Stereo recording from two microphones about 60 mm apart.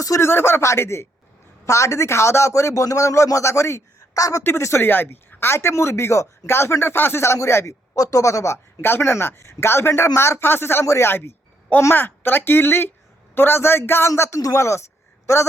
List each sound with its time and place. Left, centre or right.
0.2 s speech: left
1.6 s a man's voice: left
4.4 s speech: left
4.9 s speech: left
7.9 s a man's voice: left
8.8 s a woman's voice: left